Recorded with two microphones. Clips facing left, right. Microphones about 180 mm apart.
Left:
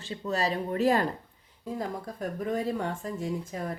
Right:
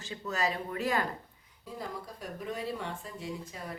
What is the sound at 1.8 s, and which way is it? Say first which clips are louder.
Speech: left 6 dB; 50° left (ahead or behind).